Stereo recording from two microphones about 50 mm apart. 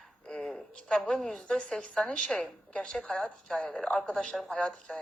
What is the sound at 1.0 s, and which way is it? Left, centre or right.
Speech, centre.